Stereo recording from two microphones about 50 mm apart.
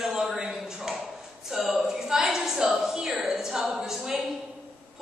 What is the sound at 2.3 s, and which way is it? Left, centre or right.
A woman's voice, centre.